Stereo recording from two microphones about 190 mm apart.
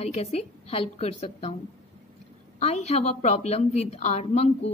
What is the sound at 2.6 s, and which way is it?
Speech, 35° left (ahead or behind).